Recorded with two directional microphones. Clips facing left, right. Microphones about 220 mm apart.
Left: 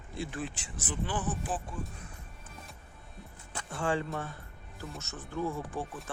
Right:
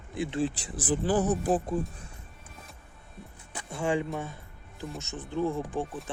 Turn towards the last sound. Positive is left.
turn(degrees=-15)  # may be behind; listen again after turning